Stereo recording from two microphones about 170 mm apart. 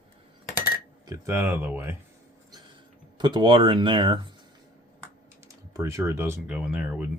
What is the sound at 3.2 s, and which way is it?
Speech, 25° right (ahead or behind).